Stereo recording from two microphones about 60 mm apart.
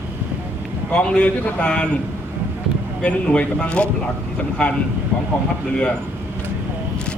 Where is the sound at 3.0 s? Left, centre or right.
Centre.